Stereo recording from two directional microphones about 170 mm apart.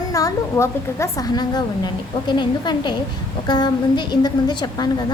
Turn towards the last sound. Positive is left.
turn(degrees=25)  # may be behind; listen again after turning